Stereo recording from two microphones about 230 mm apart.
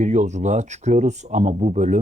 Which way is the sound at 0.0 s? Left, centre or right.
Right.